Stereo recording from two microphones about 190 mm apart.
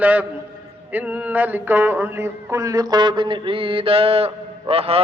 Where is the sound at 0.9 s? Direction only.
10° right (ahead or behind).